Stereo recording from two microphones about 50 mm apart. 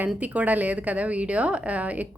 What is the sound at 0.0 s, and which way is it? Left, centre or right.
A woman's voice, right.